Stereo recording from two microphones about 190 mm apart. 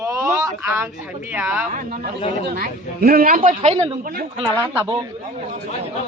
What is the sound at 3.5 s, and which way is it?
Speech, 35° right (ahead or behind).